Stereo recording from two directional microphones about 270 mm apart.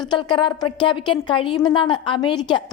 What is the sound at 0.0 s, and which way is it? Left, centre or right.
A woman's voice, centre.